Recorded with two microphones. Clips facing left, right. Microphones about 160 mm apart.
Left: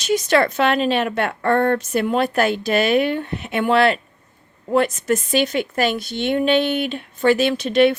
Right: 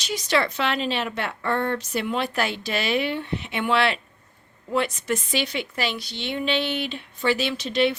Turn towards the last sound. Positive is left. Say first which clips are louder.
# left 7 dB
turn(degrees=55)  # may be behind; listen again after turning